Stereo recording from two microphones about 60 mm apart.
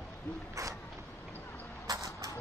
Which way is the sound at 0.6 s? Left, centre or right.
Right.